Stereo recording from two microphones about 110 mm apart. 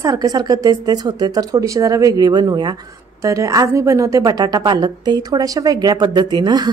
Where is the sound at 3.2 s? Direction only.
30° right (ahead or behind).